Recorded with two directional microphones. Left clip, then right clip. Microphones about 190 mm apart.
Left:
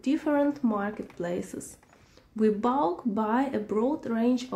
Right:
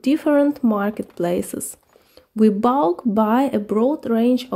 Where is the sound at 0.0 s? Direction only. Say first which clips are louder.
Right 9 dB; 45° right (ahead or behind).